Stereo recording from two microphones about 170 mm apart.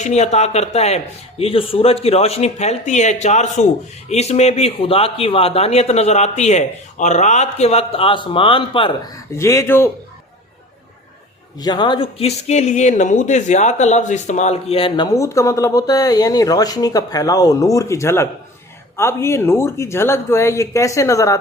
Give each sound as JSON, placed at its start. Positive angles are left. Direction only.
{"t": 0.0, "sound": "speech", "side_deg": 40}
{"t": 9.3, "sound": "speech", "side_deg": 15}
{"t": 11.6, "sound": "speech", "side_deg": 25}